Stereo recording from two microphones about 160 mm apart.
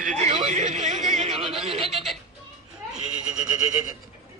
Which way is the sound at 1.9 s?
Centre (ahead or behind).